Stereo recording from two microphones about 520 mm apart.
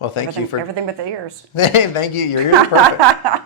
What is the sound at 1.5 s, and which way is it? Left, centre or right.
Speech, left.